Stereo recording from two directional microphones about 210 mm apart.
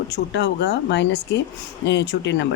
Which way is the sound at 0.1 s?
55° left (ahead or behind).